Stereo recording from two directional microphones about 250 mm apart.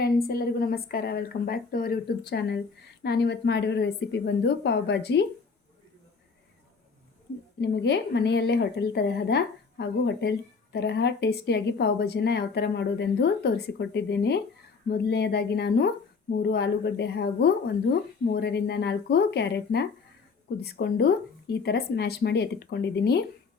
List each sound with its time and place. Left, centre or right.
0.0 s a woman's voice: left
7.6 s a woman's voice: left